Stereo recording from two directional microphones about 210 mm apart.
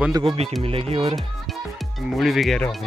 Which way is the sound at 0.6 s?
25° right (ahead or behind).